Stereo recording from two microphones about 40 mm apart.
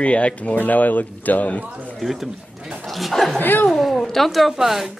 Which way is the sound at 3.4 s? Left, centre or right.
Left.